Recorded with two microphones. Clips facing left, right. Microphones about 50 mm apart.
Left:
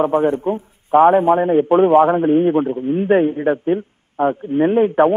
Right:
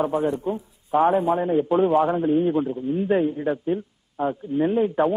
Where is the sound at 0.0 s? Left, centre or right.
Left.